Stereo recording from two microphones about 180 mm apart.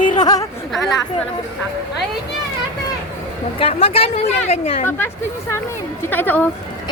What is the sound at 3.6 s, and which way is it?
A woman's voice, 30° left (ahead or behind).